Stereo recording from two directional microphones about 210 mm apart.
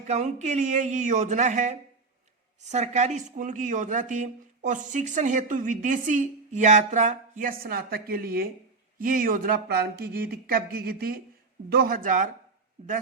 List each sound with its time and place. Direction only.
0.1 s speech: 35° right (ahead or behind)